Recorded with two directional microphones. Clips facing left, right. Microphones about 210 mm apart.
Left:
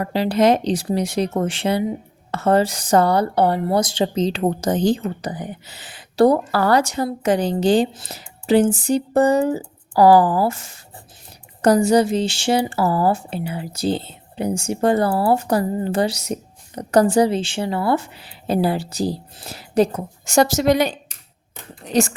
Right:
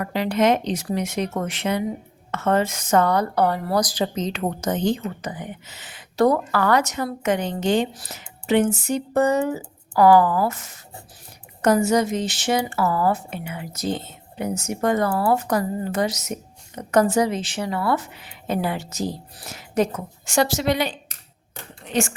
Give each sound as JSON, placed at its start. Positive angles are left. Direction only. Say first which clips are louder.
{"t": 0.0, "sound": "speech", "louder": "left 3 dB", "side_deg": 30}